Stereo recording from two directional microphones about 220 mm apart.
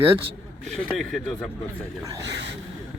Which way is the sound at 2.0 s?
15° right (ahead or behind).